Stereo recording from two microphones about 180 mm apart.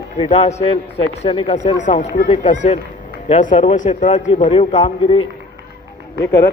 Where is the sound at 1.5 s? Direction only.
40° left (ahead or behind).